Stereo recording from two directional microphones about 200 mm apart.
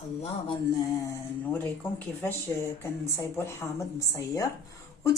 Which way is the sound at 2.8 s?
15° left (ahead or behind).